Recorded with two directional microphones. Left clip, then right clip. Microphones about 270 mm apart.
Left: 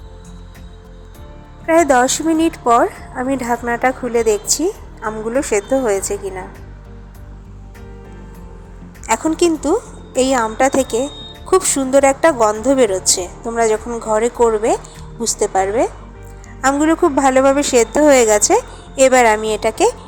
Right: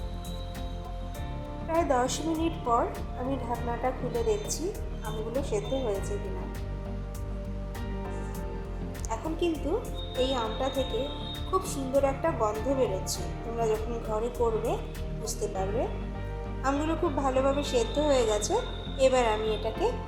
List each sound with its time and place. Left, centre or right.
1.6 s a woman's voice: left
9.0 s a woman's voice: left